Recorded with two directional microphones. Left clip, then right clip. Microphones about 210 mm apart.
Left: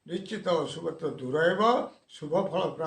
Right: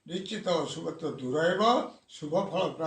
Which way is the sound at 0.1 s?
40° left (ahead or behind).